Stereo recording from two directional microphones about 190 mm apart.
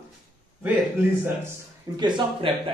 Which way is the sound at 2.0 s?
25° right (ahead or behind).